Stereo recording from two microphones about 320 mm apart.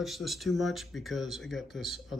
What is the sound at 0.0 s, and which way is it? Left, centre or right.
Speech, centre.